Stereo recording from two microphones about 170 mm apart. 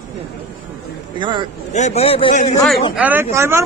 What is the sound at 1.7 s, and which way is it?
Speech, 40° left (ahead or behind).